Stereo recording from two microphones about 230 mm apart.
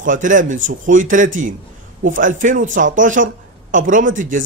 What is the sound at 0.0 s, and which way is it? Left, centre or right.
Speech, right.